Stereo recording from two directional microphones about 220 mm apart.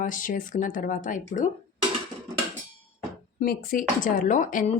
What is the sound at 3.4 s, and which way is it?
Speech, 40° left (ahead or behind).